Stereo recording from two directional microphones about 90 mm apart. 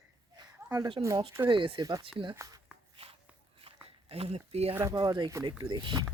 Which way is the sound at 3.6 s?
90° right.